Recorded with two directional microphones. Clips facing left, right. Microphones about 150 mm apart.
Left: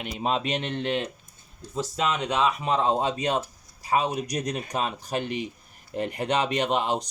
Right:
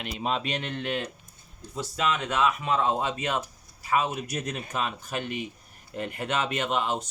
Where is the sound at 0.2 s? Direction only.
35° left (ahead or behind).